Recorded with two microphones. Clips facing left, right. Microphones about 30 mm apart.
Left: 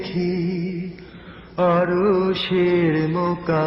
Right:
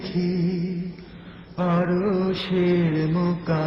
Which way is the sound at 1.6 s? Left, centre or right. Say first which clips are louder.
Left 7 dB; left.